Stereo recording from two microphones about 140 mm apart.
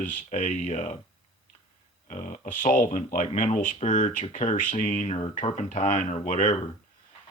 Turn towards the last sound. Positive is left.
turn(degrees=65)  # may be behind; listen again after turning